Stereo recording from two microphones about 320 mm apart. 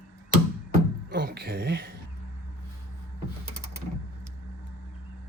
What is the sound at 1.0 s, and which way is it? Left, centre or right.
Speech, right.